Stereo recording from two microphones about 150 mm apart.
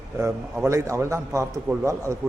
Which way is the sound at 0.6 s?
20° right (ahead or behind).